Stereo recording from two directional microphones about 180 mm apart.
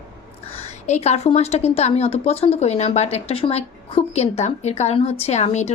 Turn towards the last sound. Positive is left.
turn(degrees=40)  # may be behind; listen again after turning